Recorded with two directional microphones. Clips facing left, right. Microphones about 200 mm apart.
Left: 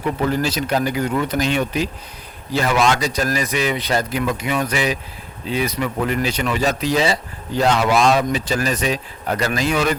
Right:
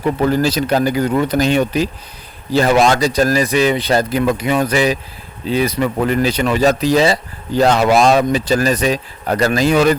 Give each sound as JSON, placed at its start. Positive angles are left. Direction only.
{"t": 0.2, "sound": "speech", "side_deg": -35}